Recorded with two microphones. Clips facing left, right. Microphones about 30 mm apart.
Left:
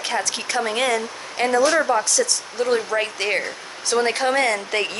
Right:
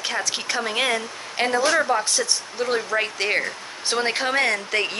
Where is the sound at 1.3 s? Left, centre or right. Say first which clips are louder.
Left 3 dB; centre.